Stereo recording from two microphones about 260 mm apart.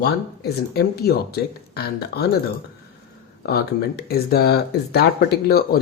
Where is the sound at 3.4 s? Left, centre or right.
Left.